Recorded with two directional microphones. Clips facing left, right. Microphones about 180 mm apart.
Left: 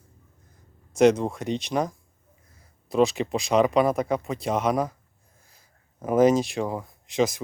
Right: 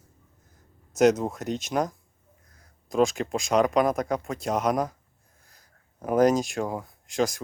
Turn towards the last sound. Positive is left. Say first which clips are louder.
# left 2 dB
turn(degrees=0)  # may be behind; listen again after turning